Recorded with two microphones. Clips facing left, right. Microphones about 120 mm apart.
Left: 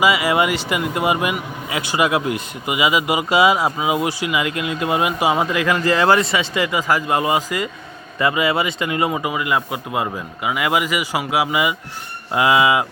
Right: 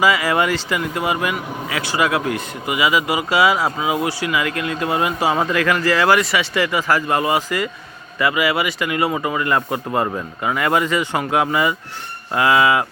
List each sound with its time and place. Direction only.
0.0 s speech: 20° left (ahead or behind)